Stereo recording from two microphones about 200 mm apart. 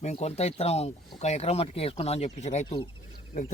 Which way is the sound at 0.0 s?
30° left (ahead or behind).